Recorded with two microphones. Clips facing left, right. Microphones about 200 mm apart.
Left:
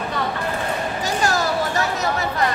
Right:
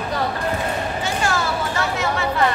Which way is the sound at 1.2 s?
40° left (ahead or behind).